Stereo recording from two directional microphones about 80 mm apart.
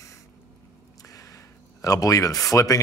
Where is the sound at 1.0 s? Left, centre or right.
Left.